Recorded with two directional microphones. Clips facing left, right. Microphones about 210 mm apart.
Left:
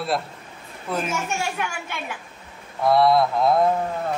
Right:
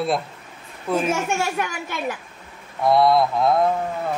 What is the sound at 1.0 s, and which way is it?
A child's voice, 45° right (ahead or behind).